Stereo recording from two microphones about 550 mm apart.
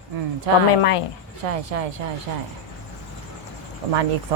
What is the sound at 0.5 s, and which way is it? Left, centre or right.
A woman's voice, right.